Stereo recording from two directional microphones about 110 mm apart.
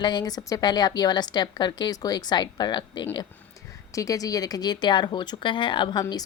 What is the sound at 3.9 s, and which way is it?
Speech, 30° left (ahead or behind).